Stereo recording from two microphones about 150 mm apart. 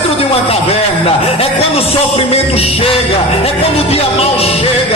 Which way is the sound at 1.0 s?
40° left (ahead or behind).